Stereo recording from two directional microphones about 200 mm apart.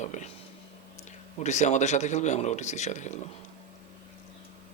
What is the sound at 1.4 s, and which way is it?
Speech, 35° left (ahead or behind).